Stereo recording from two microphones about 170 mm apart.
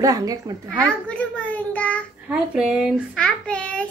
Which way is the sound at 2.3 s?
5° right (ahead or behind).